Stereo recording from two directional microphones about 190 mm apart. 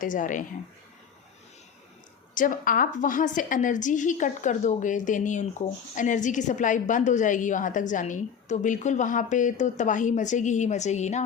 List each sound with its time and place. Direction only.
0.0 s speech: 45° left (ahead or behind)
2.3 s a woman's voice: 45° left (ahead or behind)